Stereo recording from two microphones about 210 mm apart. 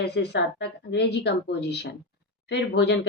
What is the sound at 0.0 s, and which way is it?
Speech, 55° left (ahead or behind).